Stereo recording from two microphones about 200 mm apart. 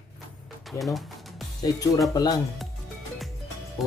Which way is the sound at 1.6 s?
20° left (ahead or behind).